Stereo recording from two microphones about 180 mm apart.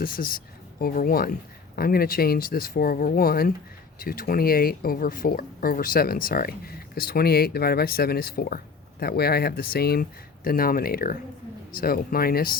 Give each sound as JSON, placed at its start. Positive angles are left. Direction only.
{"t": 0.0, "sound": "speech", "side_deg": 55}